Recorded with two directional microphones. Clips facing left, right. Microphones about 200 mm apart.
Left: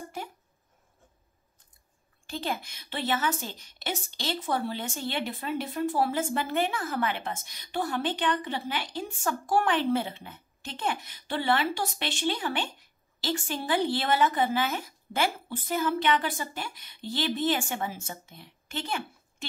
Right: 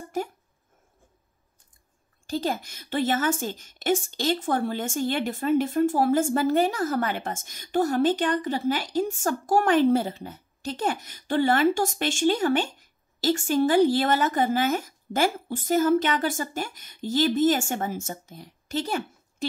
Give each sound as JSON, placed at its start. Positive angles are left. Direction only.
{"t": 2.2, "sound": "a woman's voice", "side_deg": -40}